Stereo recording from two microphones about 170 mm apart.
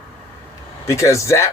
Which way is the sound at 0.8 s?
15° left (ahead or behind).